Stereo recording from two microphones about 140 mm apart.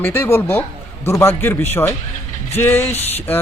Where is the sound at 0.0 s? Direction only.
15° left (ahead or behind).